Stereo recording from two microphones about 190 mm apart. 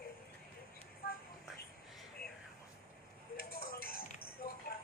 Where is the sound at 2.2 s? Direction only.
55° left (ahead or behind).